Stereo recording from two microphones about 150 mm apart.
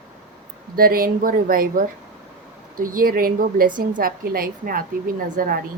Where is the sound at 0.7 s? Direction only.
75° right (ahead or behind).